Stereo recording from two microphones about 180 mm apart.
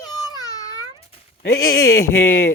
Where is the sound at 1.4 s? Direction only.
60° left (ahead or behind).